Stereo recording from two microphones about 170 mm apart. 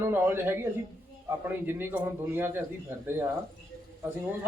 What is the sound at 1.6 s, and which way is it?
Speech, 15° right (ahead or behind).